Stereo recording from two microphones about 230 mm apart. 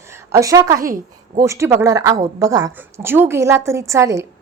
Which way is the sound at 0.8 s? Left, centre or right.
Right.